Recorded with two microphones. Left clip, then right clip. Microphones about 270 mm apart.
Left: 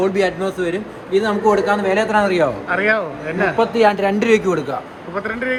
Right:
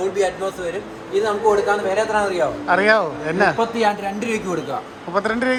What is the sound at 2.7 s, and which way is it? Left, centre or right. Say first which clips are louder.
Speech: right 6 dB; centre.